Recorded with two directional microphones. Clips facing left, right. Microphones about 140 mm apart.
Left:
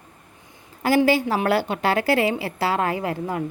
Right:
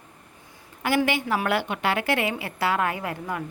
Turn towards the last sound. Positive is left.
turn(degrees=25)  # may be behind; listen again after turning